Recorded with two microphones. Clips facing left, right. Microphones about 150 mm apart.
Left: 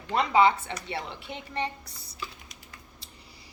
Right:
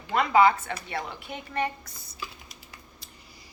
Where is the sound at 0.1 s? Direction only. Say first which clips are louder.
Right 1 dB; 25° left (ahead or behind).